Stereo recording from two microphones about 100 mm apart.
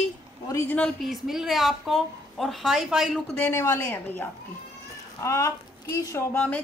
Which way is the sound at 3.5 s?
25° left (ahead or behind).